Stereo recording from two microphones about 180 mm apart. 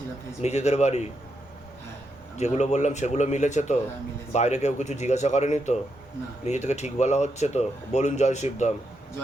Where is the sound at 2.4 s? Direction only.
40° left (ahead or behind).